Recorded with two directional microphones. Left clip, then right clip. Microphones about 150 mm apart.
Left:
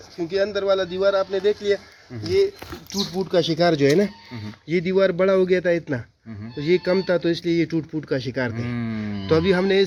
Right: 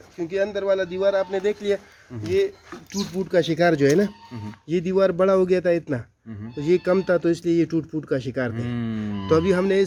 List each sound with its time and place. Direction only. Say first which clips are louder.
0.2 s speech: left 2 dB; 10° right (ahead or behind); by 1.7 s 30° right (ahead or behind)
3.3 s speech: even; 15° right (ahead or behind); by 9.8 s centre (ahead or behind)